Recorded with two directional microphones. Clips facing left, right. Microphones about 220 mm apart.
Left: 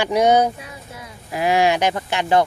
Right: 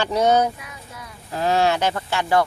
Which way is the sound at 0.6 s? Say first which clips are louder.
Left 3 dB; 25° left (ahead or behind).